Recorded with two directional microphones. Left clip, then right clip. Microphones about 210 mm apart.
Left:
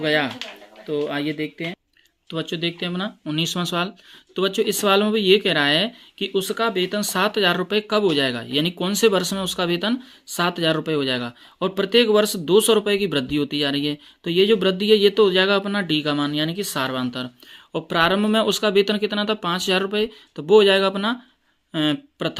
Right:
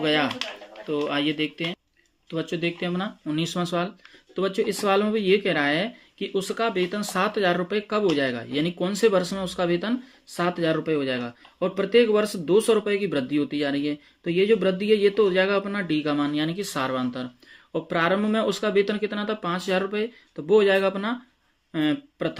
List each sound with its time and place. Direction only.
0.0 s speech: 20° left (ahead or behind)
2.2 s speech: 30° left (ahead or behind)